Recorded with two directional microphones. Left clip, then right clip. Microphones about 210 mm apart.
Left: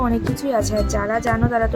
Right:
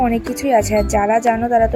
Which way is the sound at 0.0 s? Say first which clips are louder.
Right 4 dB; 5° right (ahead or behind).